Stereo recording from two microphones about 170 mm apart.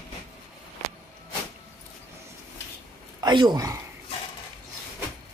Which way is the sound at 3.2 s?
25° right (ahead or behind).